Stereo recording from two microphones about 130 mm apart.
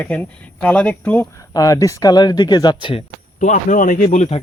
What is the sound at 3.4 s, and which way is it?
Speech, 80° left.